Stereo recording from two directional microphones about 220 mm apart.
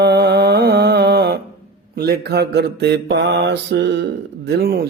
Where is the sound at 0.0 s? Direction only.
50° right (ahead or behind).